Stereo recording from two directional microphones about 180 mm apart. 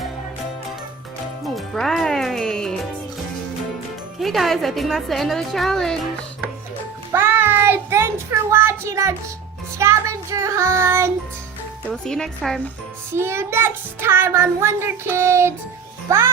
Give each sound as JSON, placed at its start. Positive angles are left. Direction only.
{"t": 1.5, "sound": "music", "side_deg": 0}
{"t": 4.2, "sound": "a woman's voice", "side_deg": 0}
{"t": 7.1, "sound": "child singing", "side_deg": -10}
{"t": 11.9, "sound": "a woman's voice", "side_deg": 5}
{"t": 13.1, "sound": "child singing", "side_deg": -15}
{"t": 16.0, "sound": "a child's voice", "side_deg": -15}